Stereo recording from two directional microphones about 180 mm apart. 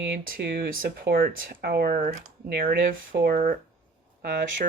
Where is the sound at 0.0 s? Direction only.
60° right (ahead or behind).